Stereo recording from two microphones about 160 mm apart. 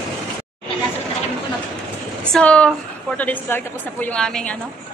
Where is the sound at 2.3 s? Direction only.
5° left (ahead or behind).